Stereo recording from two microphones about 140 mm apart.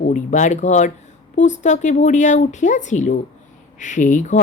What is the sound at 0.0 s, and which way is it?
Speech, 60° left (ahead or behind).